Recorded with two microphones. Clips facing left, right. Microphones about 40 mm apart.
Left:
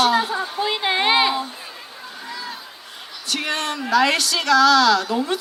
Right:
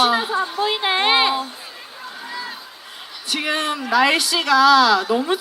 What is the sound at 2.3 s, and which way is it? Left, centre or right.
Chatter, centre.